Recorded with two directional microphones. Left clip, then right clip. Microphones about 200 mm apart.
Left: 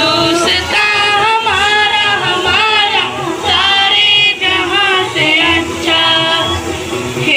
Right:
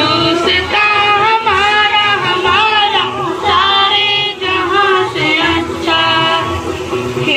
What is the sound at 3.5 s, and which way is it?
Music, 35° left (ahead or behind).